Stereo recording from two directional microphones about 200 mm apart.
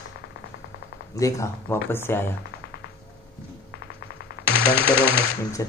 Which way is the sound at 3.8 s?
80° left.